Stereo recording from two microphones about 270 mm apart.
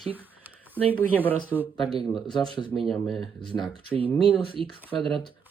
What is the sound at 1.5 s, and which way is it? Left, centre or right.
A man's voice, centre.